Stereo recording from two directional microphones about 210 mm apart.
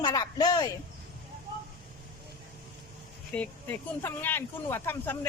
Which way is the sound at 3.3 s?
5° left (ahead or behind).